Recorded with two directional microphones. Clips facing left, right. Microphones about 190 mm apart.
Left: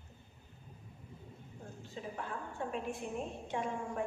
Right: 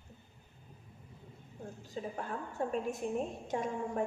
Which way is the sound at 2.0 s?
40° right (ahead or behind).